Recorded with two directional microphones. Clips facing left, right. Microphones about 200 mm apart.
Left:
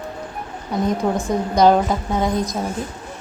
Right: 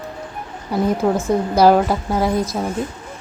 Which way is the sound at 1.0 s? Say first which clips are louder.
Right 3 dB; centre (ahead or behind).